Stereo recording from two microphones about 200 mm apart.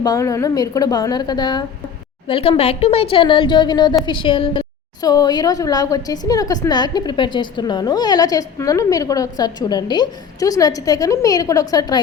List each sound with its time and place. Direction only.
0.0 s a woman's voice: 15° left (ahead or behind)